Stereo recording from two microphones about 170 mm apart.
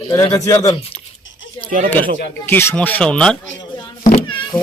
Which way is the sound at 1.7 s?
55° right (ahead or behind).